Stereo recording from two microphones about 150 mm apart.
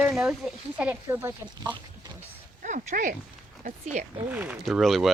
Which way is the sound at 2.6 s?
55° right (ahead or behind).